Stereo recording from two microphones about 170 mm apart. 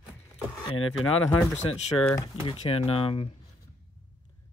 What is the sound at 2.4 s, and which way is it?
Speech, 35° left (ahead or behind).